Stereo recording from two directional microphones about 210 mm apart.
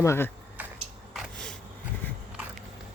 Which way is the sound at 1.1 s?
5° left (ahead or behind).